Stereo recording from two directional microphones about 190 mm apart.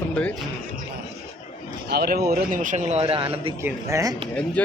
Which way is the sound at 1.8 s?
55° right (ahead or behind).